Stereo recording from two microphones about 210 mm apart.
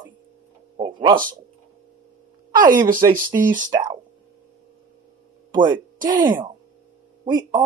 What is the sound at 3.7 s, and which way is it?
Speech, 20° right (ahead or behind).